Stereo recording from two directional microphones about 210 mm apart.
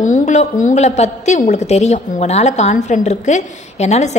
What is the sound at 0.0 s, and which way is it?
A woman's voice, 35° left (ahead or behind).